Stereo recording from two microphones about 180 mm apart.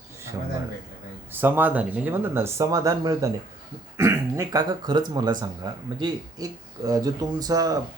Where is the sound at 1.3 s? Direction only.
10° right (ahead or behind).